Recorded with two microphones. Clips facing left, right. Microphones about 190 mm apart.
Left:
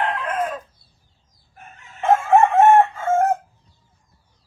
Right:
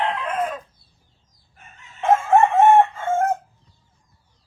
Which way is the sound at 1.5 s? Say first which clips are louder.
Left 5 dB; 60° left (ahead or behind).